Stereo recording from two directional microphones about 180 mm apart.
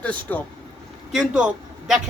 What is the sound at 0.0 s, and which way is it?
Speech, 10° left (ahead or behind).